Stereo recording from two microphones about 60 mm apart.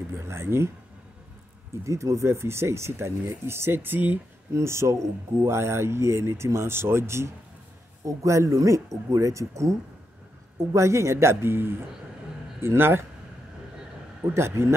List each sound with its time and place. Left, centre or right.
0.2 s speech: right
1.9 s speech: right
4.6 s speech: right
8.0 s speech: right
14.3 s speech: right